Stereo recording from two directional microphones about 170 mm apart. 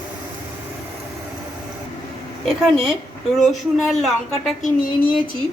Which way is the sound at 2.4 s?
Centre (ahead or behind).